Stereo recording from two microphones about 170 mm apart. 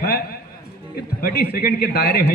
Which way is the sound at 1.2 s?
65° left (ahead or behind).